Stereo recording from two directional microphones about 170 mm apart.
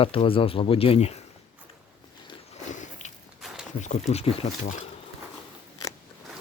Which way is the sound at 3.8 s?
40° left (ahead or behind).